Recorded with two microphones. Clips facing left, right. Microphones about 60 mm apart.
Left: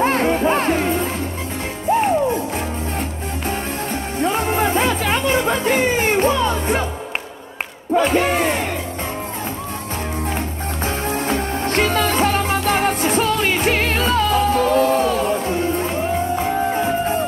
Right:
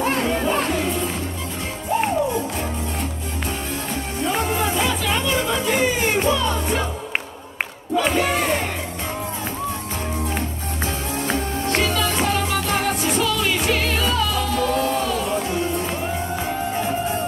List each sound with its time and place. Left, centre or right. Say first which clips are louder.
0.0 s music: left 4 dB; left
4.2 s music: left 4 dB; left
7.9 s a sound: left 4 dB; left
10.8 s music: left 4 dB; left